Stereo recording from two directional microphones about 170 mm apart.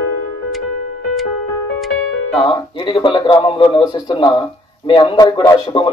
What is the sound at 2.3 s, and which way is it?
Speech, 30° left (ahead or behind).